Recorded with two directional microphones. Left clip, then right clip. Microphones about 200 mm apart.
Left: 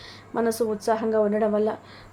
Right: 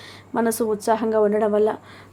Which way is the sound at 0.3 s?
35° right (ahead or behind).